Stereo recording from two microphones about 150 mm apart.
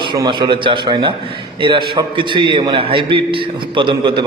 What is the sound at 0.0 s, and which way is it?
A man's voice, 30° right (ahead or behind).